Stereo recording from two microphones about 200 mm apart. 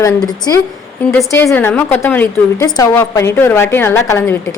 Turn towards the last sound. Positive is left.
turn(degrees=10)  # may be behind; listen again after turning